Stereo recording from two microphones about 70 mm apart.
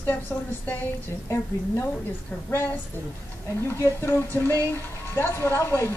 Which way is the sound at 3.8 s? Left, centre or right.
Left.